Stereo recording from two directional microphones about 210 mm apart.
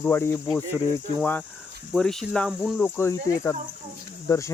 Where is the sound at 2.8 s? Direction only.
10° left (ahead or behind).